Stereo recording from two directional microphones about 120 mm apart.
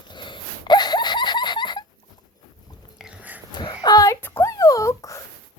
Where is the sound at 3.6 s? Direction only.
35° left (ahead or behind).